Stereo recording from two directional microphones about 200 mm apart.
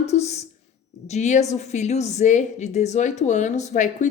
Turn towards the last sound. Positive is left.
turn(degrees=40)  # may be behind; listen again after turning